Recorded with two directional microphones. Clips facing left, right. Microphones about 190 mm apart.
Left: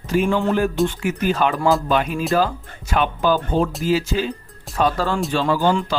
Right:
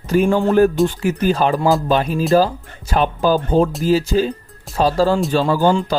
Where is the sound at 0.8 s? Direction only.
35° right (ahead or behind).